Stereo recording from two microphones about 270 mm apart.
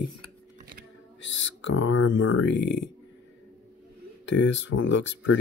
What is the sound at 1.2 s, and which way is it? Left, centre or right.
Speech, left.